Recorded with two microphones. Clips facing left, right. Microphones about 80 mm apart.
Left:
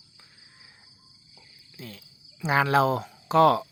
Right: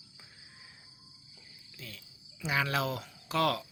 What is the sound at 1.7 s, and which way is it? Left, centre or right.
Cricket, left.